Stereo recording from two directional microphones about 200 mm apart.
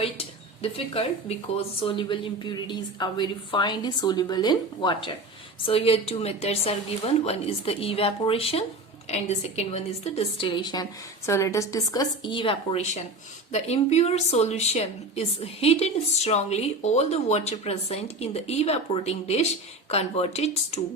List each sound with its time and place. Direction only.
0.0 s a woman's voice: 30° left (ahead or behind)